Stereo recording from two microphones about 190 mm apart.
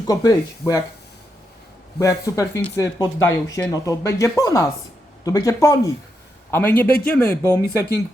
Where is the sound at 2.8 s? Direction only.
15° left (ahead or behind).